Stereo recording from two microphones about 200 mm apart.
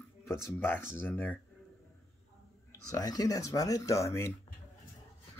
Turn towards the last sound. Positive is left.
turn(degrees=15)  # may be behind; listen again after turning